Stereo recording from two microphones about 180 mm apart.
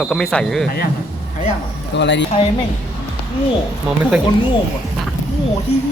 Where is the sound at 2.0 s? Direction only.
75° left (ahead or behind).